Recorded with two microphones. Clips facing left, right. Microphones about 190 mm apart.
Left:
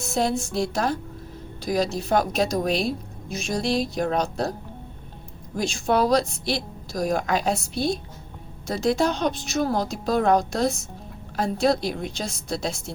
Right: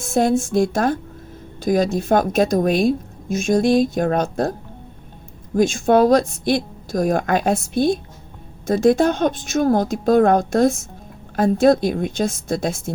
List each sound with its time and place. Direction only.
0.0 s a woman's voice: 50° right (ahead or behind)
5.5 s a woman's voice: 50° right (ahead or behind)